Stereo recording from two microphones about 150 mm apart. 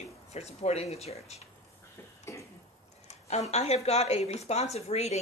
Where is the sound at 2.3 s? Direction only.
15° left (ahead or behind).